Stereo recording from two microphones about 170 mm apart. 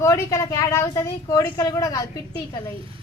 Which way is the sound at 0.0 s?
15° left (ahead or behind).